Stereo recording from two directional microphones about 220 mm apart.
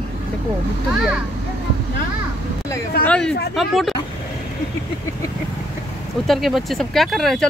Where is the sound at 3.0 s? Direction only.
5° left (ahead or behind).